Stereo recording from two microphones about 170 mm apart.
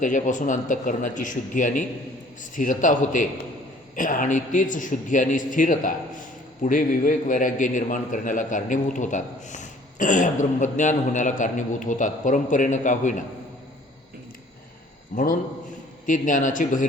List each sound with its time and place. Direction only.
0.0 s a man's voice: 50° left (ahead or behind)
15.1 s a man's voice: 55° left (ahead or behind)